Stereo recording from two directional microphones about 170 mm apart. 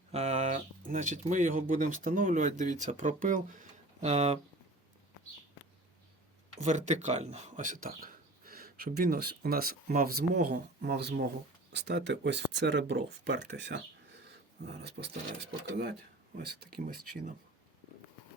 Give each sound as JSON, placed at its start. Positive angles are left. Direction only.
{"t": 0.1, "sound": "speech", "side_deg": -40}
{"t": 6.6, "sound": "speech", "side_deg": -45}
{"t": 11.7, "sound": "speech", "side_deg": -90}
{"t": 15.8, "sound": "speech", "side_deg": -70}